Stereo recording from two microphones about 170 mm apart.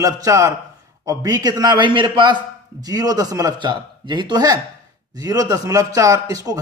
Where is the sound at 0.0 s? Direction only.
20° right (ahead or behind).